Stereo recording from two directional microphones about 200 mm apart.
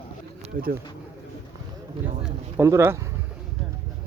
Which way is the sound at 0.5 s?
45° right (ahead or behind).